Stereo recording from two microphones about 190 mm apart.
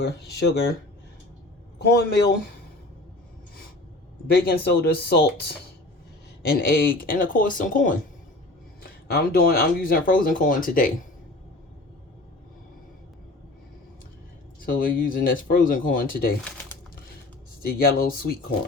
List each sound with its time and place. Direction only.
0.0 s speech: 60° left (ahead or behind)
1.8 s speech: 60° left (ahead or behind)
4.3 s speech: 60° left (ahead or behind)
6.5 s speech: 50° left (ahead or behind)
14.6 s speech: 45° left (ahead or behind)
17.6 s speech: 50° left (ahead or behind)